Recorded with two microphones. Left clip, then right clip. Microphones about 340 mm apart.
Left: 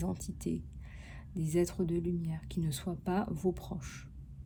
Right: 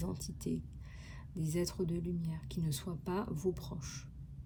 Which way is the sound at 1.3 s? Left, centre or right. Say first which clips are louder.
Left 5 dB; centre.